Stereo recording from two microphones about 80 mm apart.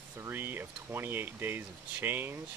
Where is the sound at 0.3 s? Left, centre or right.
Right.